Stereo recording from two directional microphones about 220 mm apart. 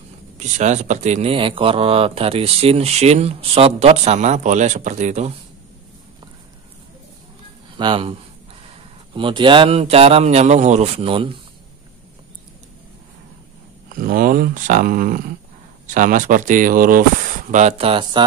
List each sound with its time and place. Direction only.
0.4 s speech: 30° right (ahead or behind)
7.7 s speech: 25° right (ahead or behind)
13.8 s speech: 40° right (ahead or behind)